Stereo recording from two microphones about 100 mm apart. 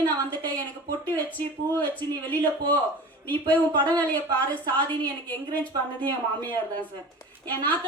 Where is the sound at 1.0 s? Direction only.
20° left (ahead or behind).